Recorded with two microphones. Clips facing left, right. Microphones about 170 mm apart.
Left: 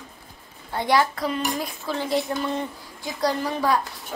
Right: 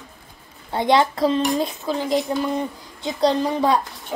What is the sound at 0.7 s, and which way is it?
A child's voice, 20° right (ahead or behind).